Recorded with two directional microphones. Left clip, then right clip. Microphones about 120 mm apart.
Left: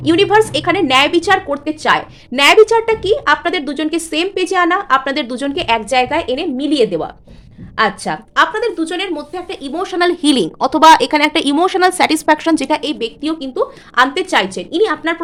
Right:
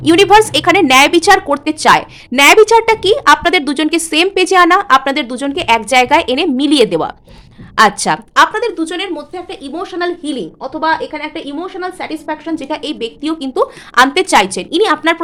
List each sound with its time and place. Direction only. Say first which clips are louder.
0.0 s a woman's voice: right 4 dB; 30° right (ahead or behind)
2.3 s a woman's voice: right 3 dB; 25° right (ahead or behind)
5.9 s a woman's voice: right 5 dB; 35° right (ahead or behind)
8.4 s speech: right 2 dB; 25° right (ahead or behind)
8.8 s speech: right 1 dB; 10° right (ahead or behind)
9.1 s a woman's voice: even; 10° left (ahead or behind)
9.8 s a woman's voice: left 4 dB; 30° left (ahead or behind)
10.1 s a woman's voice: left 6 dB; 50° left (ahead or behind)
10.3 s a woman's voice: left 7 dB; 90° left
13.0 s a woman's voice: even; 5° right (ahead or behind)
13.4 s a woman's voice: right 3 dB; 30° right (ahead or behind)